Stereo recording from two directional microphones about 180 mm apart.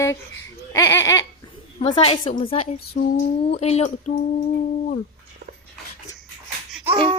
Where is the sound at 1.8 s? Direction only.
40° left (ahead or behind).